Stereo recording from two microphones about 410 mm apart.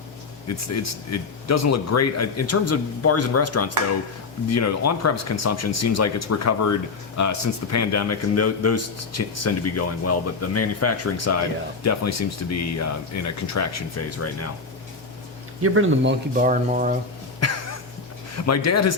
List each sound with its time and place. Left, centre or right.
1.1 s speech: left
15.6 s speech: right
17.4 s a sound: left
18.3 s speech: left